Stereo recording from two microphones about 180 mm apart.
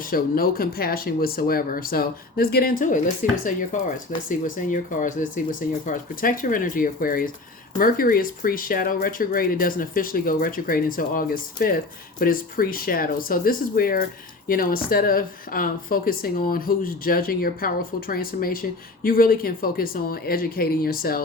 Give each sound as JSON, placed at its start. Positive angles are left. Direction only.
{"t": 0.0, "sound": "speech", "side_deg": 55}